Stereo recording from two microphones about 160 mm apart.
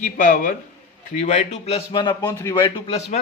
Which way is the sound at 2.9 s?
40° left (ahead or behind).